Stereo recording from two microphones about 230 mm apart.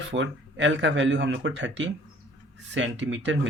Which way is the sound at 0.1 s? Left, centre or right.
Right.